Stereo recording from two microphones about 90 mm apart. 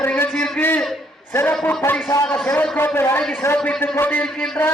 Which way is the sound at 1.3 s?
25° left (ahead or behind).